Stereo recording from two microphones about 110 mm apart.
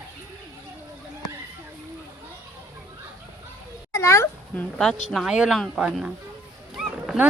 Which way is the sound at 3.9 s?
25° left (ahead or behind).